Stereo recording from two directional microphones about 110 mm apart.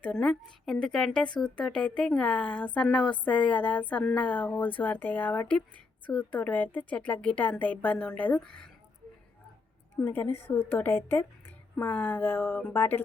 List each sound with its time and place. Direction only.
0.0 s a woman's voice: 5° left (ahead or behind)
10.0 s a woman's voice: 15° left (ahead or behind)